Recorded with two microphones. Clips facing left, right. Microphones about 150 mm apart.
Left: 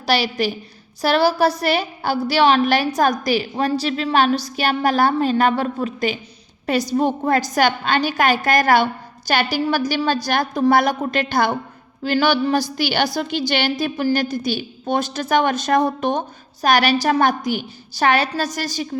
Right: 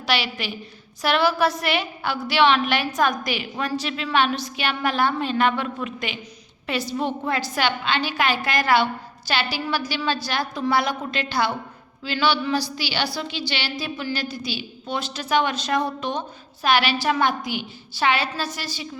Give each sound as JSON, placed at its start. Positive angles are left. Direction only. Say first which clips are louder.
{"t": 0.0, "sound": "a woman's voice", "louder": "left 6 dB", "side_deg": 40}